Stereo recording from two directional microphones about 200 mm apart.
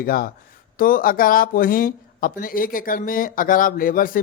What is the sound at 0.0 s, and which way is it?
Speech, 45° left (ahead or behind).